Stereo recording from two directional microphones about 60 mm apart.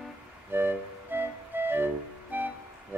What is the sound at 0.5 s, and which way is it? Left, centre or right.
Music, right.